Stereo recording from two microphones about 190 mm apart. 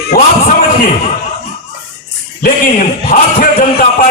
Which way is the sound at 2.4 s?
45° left (ahead or behind).